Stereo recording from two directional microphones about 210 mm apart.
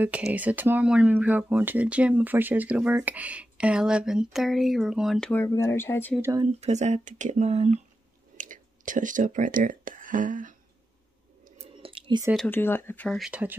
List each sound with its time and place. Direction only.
0.0 s speech: 5° right (ahead or behind); by 6.1 s 10° left (ahead or behind)
6.3 s speech: 30° right (ahead or behind)
11.4 s a sound: 30° right (ahead or behind)
12.4 s speech: 10° left (ahead or behind); by 13.6 s 5° right (ahead or behind)